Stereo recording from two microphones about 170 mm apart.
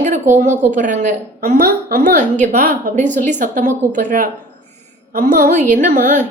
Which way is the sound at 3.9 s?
50° right (ahead or behind).